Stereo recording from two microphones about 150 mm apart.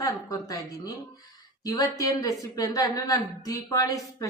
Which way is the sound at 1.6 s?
25° left (ahead or behind).